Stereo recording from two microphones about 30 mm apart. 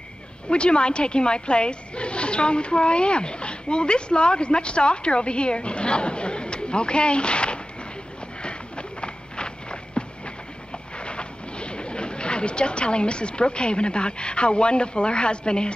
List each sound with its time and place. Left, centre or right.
0.5 s speech: left
8.4 s a sound: left
11.0 s speech: left